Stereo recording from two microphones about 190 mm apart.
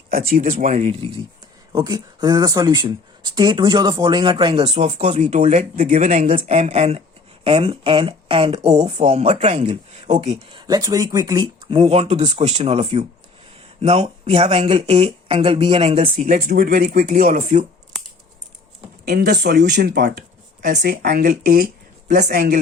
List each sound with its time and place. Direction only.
0.1 s speech: 50° right (ahead or behind); by 1.2 s 30° right (ahead or behind)
1.7 s speech: 20° right (ahead or behind); by 17.7 s 45° right (ahead or behind)
19.0 s speech: 55° right (ahead or behind)